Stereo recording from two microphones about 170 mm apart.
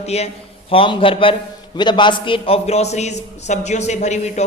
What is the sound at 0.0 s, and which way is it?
A man's voice, 40° left (ahead or behind).